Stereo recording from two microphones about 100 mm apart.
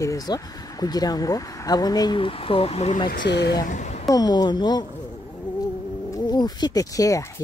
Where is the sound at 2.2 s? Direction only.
65° left (ahead or behind); by 2.9 s 85° left.